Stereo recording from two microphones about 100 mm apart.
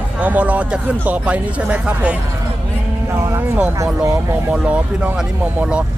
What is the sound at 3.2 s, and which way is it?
Speech, 30° right (ahead or behind).